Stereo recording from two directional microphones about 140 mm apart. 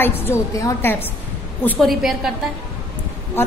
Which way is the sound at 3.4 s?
15° left (ahead or behind).